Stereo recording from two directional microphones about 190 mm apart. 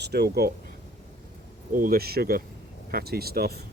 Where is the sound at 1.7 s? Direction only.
50° right (ahead or behind).